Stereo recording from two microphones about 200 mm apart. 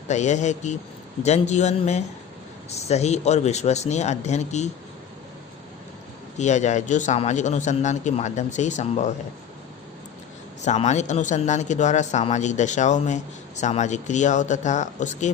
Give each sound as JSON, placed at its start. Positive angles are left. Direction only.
{"t": 0.1, "sound": "speech", "side_deg": 35}
{"t": 6.3, "sound": "speech", "side_deg": 35}
{"t": 10.7, "sound": "speech", "side_deg": 35}